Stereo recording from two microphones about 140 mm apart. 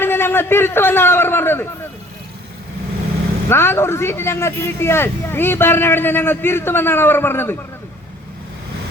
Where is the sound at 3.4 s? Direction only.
15° left (ahead or behind).